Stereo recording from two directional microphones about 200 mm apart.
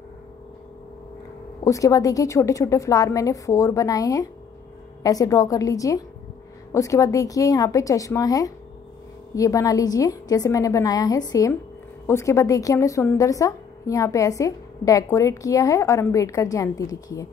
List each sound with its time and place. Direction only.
1.6 s speech: 15° left (ahead or behind)